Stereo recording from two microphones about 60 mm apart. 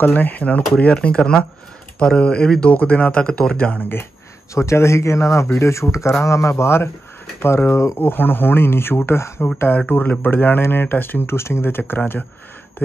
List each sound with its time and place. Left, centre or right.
0.0 s speech: left
4.6 s speech: left
7.7 s speech: left
8.0 s speech: left
9.8 s speech: left